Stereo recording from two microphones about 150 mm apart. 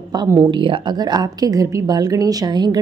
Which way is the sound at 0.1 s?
30° right (ahead or behind).